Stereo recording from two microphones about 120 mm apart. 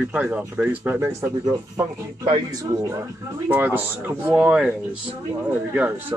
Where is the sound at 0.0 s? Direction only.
10° right (ahead or behind).